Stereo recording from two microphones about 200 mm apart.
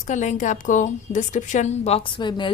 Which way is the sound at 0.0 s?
35° left (ahead or behind).